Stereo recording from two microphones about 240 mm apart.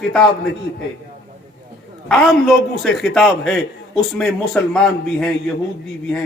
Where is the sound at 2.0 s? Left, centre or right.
Centre.